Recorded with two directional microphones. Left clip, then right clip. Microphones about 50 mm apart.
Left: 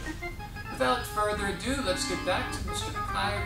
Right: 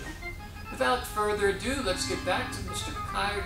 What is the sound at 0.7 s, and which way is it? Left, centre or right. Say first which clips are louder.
Speech: even; centre.